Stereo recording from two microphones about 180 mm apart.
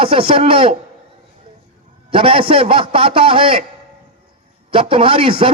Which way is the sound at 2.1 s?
30° right (ahead or behind).